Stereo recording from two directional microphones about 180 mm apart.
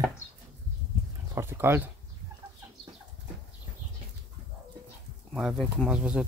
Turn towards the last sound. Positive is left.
turn(degrees=-5)  # may be behind; listen again after turning